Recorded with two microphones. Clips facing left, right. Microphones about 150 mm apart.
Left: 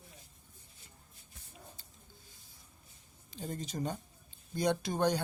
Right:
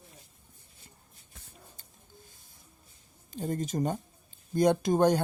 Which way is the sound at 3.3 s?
50° right (ahead or behind).